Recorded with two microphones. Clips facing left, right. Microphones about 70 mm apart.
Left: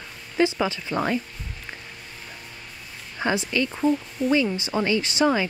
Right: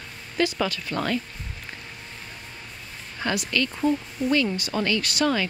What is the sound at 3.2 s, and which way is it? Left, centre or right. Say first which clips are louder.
Speech: left 2 dB; centre.